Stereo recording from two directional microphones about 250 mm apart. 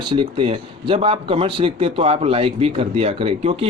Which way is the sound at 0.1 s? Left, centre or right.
Centre.